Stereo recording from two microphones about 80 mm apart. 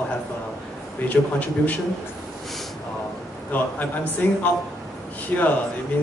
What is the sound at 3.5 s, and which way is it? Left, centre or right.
A man's voice, left.